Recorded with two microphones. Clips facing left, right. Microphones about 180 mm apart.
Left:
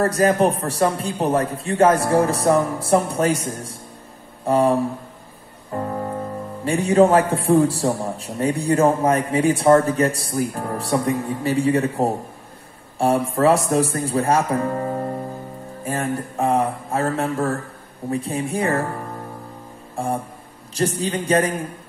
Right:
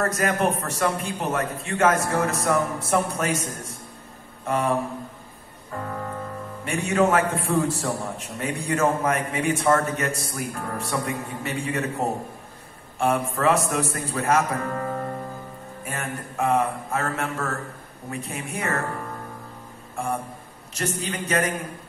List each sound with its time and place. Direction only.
0.0 s speech: 35° left (ahead or behind)
20.0 s speech: 30° left (ahead or behind)